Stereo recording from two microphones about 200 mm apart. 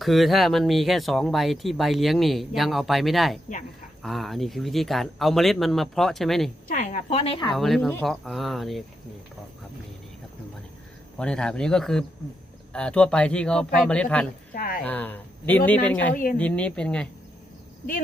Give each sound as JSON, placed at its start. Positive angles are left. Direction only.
{"t": 0.0, "sound": "speech", "side_deg": 0}
{"t": 6.7, "sound": "a woman's voice", "side_deg": 35}
{"t": 7.5, "sound": "speech", "side_deg": 0}
{"t": 11.2, "sound": "speech", "side_deg": 5}
{"t": 14.5, "sound": "speech", "side_deg": 45}
{"t": 14.8, "sound": "speech", "side_deg": 10}
{"t": 16.1, "sound": "speech", "side_deg": 45}
{"t": 16.4, "sound": "speech", "side_deg": 5}